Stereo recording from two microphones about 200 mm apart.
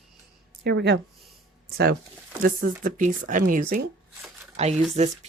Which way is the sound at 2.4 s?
45° right (ahead or behind).